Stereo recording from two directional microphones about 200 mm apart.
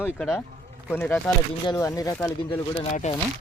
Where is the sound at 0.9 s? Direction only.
10° left (ahead or behind).